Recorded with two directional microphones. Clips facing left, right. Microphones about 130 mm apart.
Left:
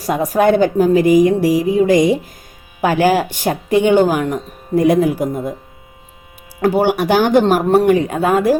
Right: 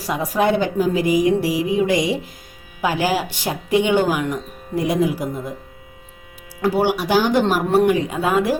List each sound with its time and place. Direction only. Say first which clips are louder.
0.0 s speech: left 5 dB; 45° left (ahead or behind)
6.6 s speech: left 4 dB; 50° left (ahead or behind)